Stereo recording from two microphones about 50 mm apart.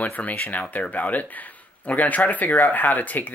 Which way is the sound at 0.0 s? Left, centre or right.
Left.